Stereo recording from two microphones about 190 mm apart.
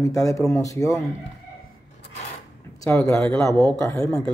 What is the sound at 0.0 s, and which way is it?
Speech, 15° left (ahead or behind).